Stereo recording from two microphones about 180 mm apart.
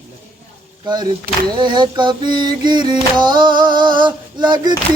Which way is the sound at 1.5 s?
25° right (ahead or behind).